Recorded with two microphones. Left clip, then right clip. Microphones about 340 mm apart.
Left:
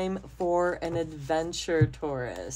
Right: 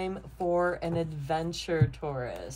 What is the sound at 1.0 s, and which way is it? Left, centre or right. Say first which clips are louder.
Speech: left 2 dB; left.